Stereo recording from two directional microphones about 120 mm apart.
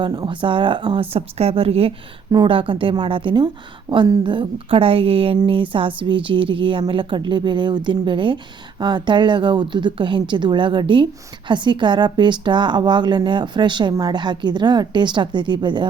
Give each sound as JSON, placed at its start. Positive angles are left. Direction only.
{"t": 0.0, "sound": "a woman's voice", "side_deg": -35}